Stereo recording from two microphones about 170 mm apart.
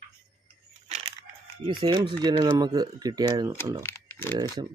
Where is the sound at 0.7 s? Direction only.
40° right (ahead or behind).